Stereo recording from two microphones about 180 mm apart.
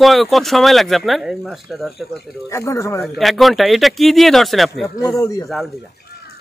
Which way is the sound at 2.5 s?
15° left (ahead or behind).